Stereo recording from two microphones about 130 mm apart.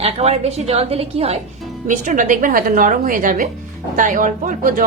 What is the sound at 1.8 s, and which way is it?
Speech, 75° right (ahead or behind).